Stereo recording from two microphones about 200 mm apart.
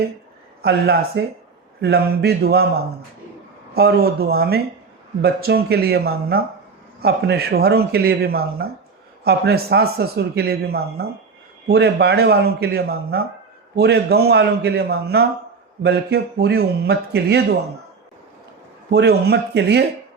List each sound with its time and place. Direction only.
0.6 s a man's voice: 55° right (ahead or behind)
18.9 s a man's voice: 55° right (ahead or behind)